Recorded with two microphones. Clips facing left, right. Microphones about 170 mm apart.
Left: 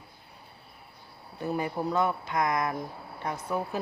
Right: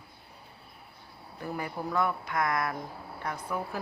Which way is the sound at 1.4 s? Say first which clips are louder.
Left 5 dB; 20° left (ahead or behind).